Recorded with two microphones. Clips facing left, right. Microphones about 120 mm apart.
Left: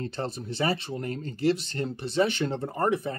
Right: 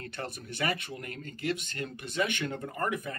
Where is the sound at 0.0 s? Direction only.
25° left (ahead or behind).